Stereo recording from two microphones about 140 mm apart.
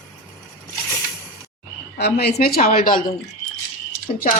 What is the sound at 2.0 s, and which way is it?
A woman's voice, 90° left.